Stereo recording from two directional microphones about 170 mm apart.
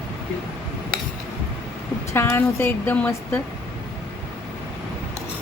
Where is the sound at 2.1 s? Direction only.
15° left (ahead or behind).